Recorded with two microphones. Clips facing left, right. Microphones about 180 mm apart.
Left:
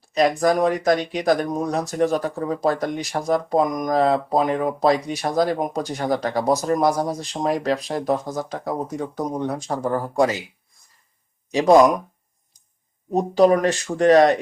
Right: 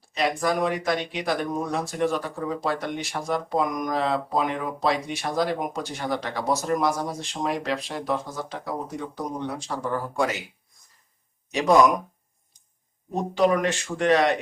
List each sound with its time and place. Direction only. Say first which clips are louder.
0.1 s speech: left 6 dB; 40° left (ahead or behind)
11.5 s speech: left 5 dB; 35° left (ahead or behind)
13.1 s speech: left 6 dB; 35° left (ahead or behind)